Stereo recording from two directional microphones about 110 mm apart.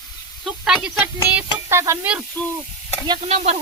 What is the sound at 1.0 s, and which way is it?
Music, 15° right (ahead or behind).